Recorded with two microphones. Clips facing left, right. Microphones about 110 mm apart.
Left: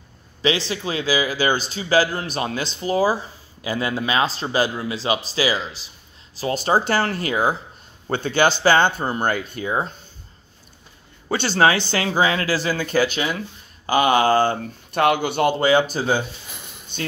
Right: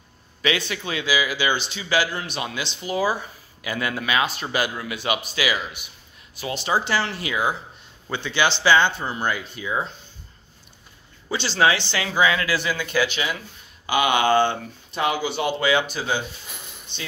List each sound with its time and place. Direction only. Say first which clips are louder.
0.4 s a man's voice: left 3 dB; 30° left (ahead or behind)
11.2 s a man's voice: left 3 dB; 50° left (ahead or behind)
14.9 s speech: left 5 dB; 60° left (ahead or behind)
15.6 s a man's voice: left 4 dB; 40° left (ahead or behind)